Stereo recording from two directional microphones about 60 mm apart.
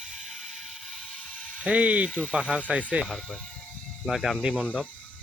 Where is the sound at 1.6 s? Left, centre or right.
Right.